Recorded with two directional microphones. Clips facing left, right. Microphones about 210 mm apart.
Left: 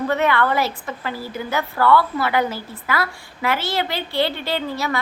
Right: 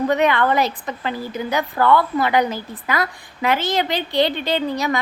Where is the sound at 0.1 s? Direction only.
20° right (ahead or behind).